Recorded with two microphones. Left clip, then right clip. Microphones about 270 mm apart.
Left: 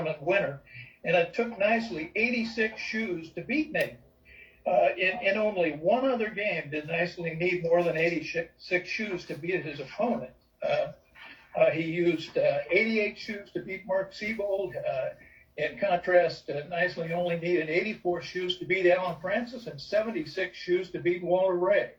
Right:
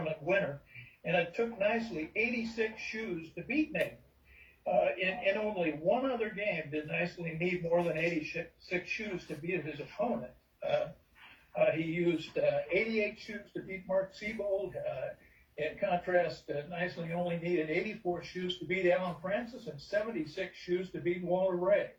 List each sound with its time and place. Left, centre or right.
0.0 s a man's voice: left
11.5 s a man's voice: left
15.5 s a man's voice: left